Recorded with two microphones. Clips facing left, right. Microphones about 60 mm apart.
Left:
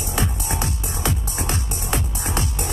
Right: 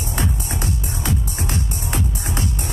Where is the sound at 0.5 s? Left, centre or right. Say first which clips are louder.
Even; left.